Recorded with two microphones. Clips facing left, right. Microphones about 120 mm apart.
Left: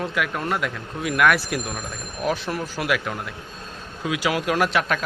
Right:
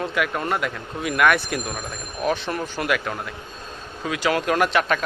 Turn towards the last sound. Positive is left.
turn(degrees=0)  # may be behind; listen again after turning